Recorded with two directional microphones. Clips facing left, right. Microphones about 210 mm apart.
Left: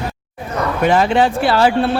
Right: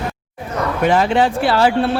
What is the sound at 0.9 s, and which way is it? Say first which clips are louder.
Speech: left 1 dB; 10° left (ahead or behind).